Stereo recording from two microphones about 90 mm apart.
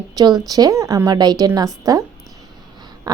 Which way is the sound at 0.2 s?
45° right (ahead or behind).